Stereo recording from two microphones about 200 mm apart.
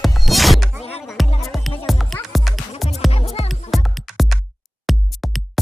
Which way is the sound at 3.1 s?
30° left (ahead or behind).